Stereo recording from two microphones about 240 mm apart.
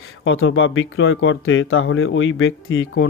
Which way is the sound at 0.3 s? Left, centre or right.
Left.